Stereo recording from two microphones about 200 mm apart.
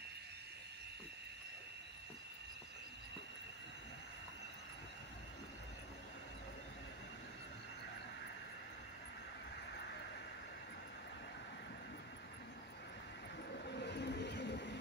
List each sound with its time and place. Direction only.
13.7 s vehicle: 60° left (ahead or behind)